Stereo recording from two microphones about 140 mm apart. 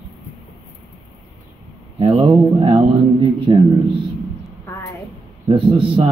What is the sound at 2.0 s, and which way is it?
Speech, 35° right (ahead or behind).